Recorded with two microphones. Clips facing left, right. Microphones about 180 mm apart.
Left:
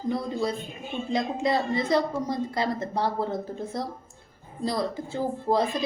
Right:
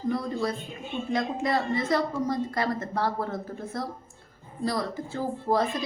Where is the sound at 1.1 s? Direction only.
15° left (ahead or behind).